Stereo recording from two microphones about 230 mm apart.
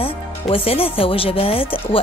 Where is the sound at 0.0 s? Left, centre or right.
Left.